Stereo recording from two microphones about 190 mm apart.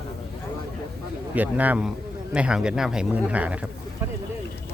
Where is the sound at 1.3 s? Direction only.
10° right (ahead or behind).